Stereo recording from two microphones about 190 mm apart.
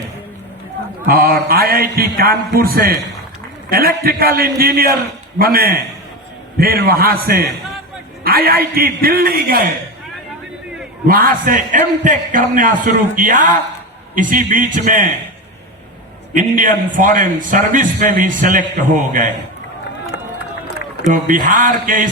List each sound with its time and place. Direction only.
1.0 s a man's voice: 50° right (ahead or behind)
11.1 s a man's voice: 50° right (ahead or behind)
16.3 s a man's voice: 45° right (ahead or behind)
20.1 s run: 65° left (ahead or behind)
21.1 s a man's voice: 45° right (ahead or behind)